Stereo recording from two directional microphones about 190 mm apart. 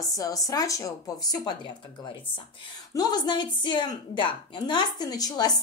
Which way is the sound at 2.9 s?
20° left (ahead or behind).